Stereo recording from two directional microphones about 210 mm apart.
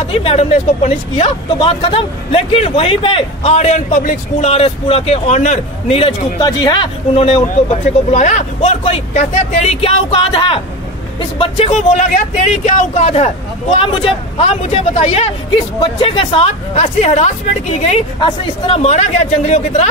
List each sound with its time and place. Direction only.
0.0 s speech: 25° left (ahead or behind)